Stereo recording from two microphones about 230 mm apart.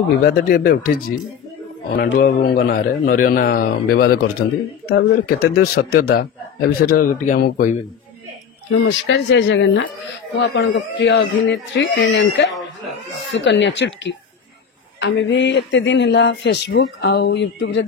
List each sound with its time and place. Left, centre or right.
0.2 s a man's voice: left
8.7 s speech: left